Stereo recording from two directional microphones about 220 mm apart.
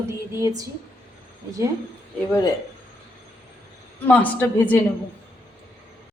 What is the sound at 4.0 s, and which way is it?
Speech, 5° left (ahead or behind).